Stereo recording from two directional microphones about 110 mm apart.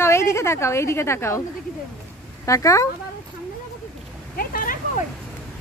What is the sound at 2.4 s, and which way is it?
Speech, 30° left (ahead or behind).